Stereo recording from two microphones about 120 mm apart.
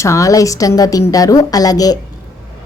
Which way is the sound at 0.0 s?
25° left (ahead or behind).